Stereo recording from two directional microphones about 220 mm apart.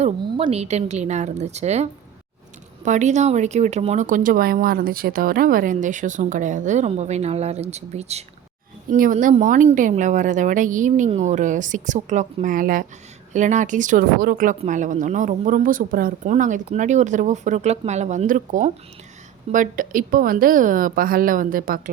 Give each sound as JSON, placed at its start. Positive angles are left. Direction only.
{"t": 0.0, "sound": "speech", "side_deg": -25}